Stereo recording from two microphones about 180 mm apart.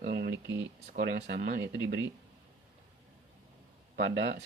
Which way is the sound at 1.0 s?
65° right (ahead or behind).